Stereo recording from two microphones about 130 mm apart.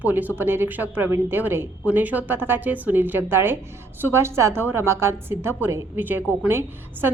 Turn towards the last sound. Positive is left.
turn(degrees=-15)  # may be behind; listen again after turning